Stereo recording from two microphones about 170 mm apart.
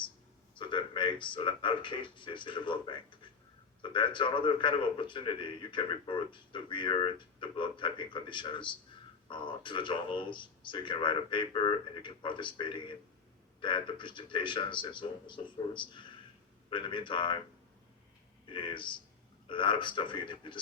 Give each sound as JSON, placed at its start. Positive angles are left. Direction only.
{"t": 0.5, "sound": "a man's voice", "side_deg": 30}
{"t": 18.4, "sound": "a man's voice", "side_deg": 30}